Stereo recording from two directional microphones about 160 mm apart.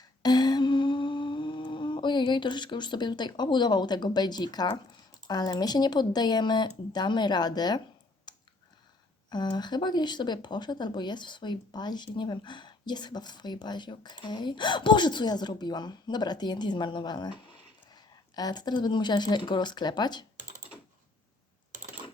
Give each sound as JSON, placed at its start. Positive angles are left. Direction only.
{"t": 0.2, "sound": "humming", "side_deg": 25}
{"t": 5.3, "sound": "speech", "side_deg": 25}
{"t": 8.3, "sound": "a sound", "side_deg": 25}
{"t": 9.3, "sound": "speech", "side_deg": 25}